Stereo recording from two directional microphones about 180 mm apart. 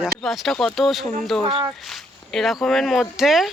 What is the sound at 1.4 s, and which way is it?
Speech, 30° right (ahead or behind).